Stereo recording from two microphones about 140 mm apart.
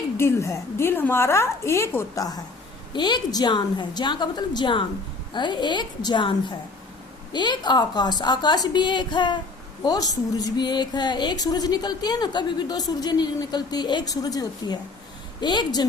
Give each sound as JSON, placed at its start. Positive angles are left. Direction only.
{"t": 0.2, "sound": "a woman's voice", "side_deg": 20}